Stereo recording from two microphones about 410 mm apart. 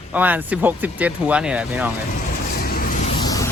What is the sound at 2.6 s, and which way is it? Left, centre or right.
Vehicle, left.